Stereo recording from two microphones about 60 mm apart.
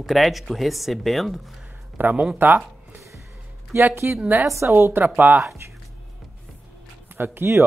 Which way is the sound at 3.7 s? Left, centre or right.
Right.